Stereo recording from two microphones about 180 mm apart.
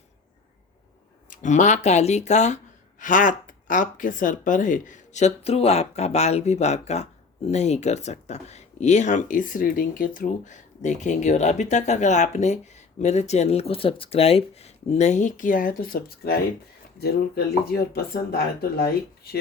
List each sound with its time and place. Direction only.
1.3 s speech: 45° left (ahead or behind)